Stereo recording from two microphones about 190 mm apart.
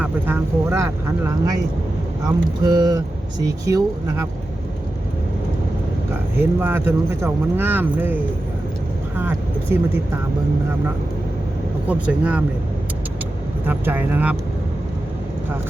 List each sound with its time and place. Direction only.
0.0 s speech: 15° right (ahead or behind)
2.6 s speech: 20° right (ahead or behind)
6.4 s speech: 10° right (ahead or behind)
11.9 s speech: 5° right (ahead or behind)
13.7 s speech: 10° right (ahead or behind)